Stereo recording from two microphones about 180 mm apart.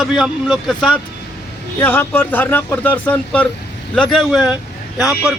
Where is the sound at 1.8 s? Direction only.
10° left (ahead or behind).